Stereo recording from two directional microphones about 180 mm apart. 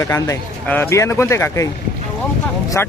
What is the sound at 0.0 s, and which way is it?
Speech, 15° left (ahead or behind).